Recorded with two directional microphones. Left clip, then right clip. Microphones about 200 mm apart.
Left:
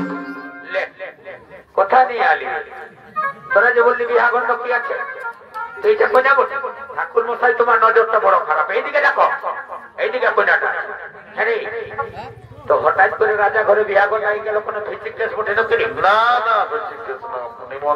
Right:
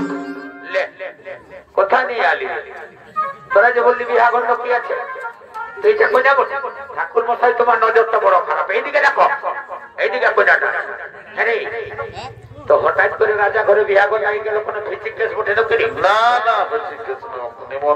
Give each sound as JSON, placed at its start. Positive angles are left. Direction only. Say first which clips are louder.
{"t": 0.7, "sound": "music", "louder": "right 2 dB", "side_deg": -55}
{"t": 1.8, "sound": "a man's voice", "louder": "left 1 dB", "side_deg": -60}
{"t": 3.5, "sound": "a man's voice", "louder": "right 1 dB", "side_deg": -55}